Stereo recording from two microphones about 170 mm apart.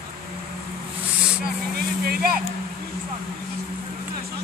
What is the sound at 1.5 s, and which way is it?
Speech, 60° right (ahead or behind).